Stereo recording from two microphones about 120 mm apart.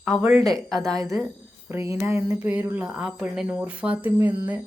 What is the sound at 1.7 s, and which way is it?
Speech, 25° right (ahead or behind).